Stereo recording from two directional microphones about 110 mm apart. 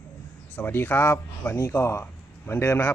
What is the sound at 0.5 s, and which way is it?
Speech, 15° left (ahead or behind).